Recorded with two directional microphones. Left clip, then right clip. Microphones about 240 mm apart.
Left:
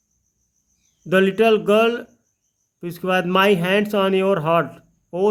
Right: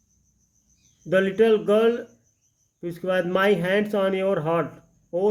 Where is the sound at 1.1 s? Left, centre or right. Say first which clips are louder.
Left 3 dB; left.